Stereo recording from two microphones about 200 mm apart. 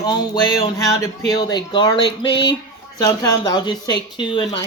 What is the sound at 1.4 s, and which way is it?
Speech, 20° left (ahead or behind).